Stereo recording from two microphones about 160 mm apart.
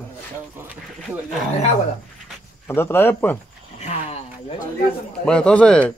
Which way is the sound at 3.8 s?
45° left (ahead or behind).